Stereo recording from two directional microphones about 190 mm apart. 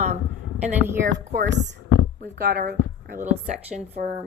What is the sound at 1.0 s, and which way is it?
Speech, 70° right (ahead or behind).